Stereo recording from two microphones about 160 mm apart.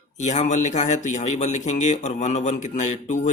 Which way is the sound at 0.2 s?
45° left (ahead or behind).